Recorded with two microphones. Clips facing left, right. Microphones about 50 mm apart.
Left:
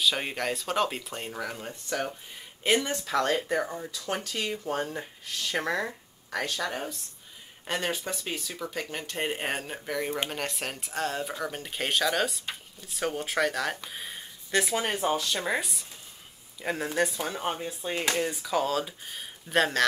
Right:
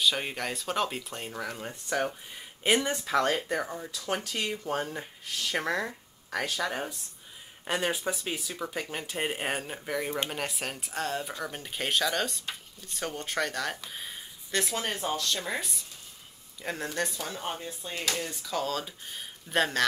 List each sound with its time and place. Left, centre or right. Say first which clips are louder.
0.0 s speech: left 1 dB; centre
1.7 s speech: right 4 dB; centre
14.9 s speech: left 3 dB; centre
17.2 s speech: left 4 dB; centre
18.3 s speech: left 4 dB; centre